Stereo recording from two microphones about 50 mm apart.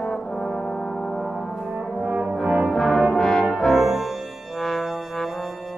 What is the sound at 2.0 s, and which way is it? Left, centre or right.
Brass instrument, centre.